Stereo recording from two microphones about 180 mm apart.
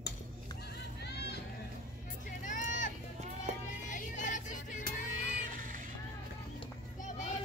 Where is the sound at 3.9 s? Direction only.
45° left (ahead or behind).